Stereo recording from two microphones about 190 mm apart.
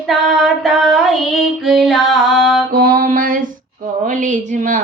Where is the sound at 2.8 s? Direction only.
50° right (ahead or behind).